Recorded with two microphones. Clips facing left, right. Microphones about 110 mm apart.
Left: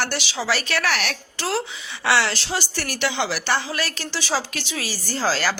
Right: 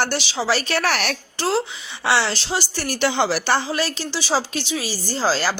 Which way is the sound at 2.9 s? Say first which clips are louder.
Right 5 dB; 35° right (ahead or behind).